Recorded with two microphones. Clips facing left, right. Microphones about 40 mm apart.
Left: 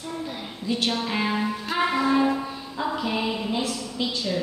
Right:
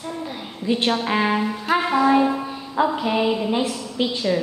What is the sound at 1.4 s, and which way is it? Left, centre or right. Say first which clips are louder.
Music: right 4 dB; centre.